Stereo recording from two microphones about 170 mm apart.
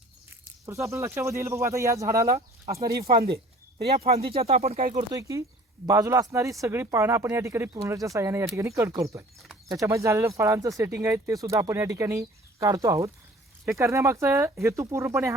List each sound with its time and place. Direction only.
0.4 s speech: 20° right (ahead or behind)
3.1 s speech: 65° right (ahead or behind)
4.4 s speech: 40° right (ahead or behind)
5.1 s speech: 20° right (ahead or behind)